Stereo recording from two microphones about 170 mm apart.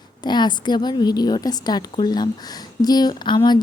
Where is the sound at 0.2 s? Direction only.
25° left (ahead or behind).